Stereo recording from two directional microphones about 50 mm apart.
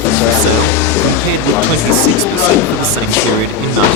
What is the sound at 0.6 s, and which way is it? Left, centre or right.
Speech, left.